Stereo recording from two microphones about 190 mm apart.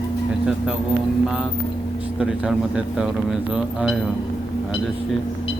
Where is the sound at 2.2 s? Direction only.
5° right (ahead or behind).